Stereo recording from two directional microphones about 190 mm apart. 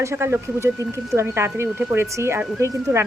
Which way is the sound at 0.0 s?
15° right (ahead or behind).